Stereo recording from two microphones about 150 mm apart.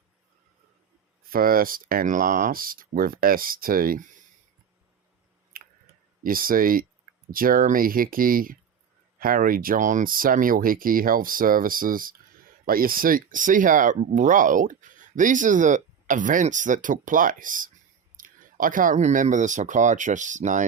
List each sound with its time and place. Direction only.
1.3 s speech: 75° right (ahead or behind)
5.5 s a sound: 75° right (ahead or behind)
6.2 s speech: 70° right (ahead or behind); by 20.7 s 55° right (ahead or behind)